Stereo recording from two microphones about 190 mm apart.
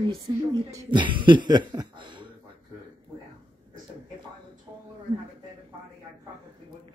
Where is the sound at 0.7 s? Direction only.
25° right (ahead or behind).